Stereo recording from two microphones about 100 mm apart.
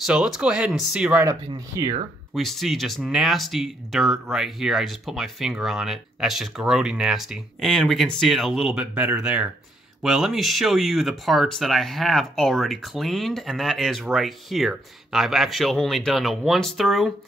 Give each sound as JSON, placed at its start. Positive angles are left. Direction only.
{"t": 0.0, "sound": "speech", "side_deg": -5}
{"t": 1.8, "sound": "speech", "side_deg": -30}
{"t": 2.3, "sound": "speech", "side_deg": 0}